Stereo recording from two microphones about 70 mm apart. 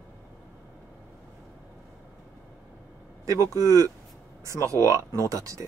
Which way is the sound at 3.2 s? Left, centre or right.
Right.